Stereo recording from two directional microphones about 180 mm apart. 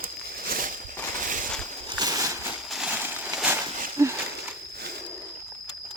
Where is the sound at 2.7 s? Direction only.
5° right (ahead or behind).